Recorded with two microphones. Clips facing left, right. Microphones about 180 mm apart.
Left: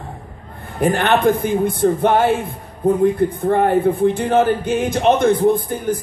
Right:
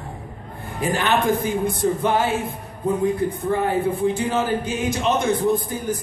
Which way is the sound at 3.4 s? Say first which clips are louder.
Left 7 dB; 55° left (ahead or behind).